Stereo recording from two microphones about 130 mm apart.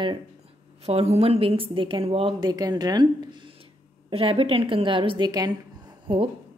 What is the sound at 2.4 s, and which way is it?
A woman's voice, 30° right (ahead or behind).